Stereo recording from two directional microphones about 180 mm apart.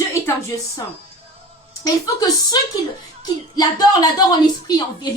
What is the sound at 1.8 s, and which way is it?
A woman's voice, 20° left (ahead or behind).